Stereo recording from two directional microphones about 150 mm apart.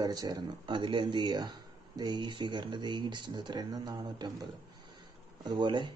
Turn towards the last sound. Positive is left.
turn(degrees=-30)  # may be behind; listen again after turning